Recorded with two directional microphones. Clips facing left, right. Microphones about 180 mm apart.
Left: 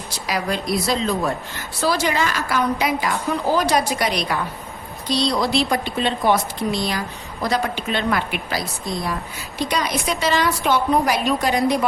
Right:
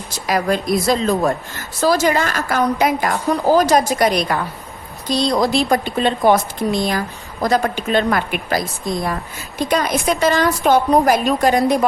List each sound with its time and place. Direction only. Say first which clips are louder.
0.3 s a woman's voice: right 5 dB; 45° right (ahead or behind)